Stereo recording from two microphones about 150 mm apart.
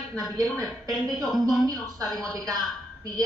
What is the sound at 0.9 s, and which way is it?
Speech, centre (ahead or behind).